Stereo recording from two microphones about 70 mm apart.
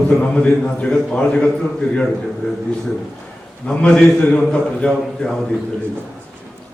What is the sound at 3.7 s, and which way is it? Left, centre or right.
A man's voice, centre.